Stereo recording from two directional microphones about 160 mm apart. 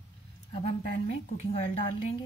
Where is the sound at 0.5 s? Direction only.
40° left (ahead or behind).